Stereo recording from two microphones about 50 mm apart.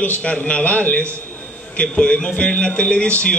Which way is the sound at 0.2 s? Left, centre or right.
Left.